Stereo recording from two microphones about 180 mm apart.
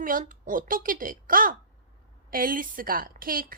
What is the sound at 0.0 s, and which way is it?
A woman's voice, 50° right (ahead or behind).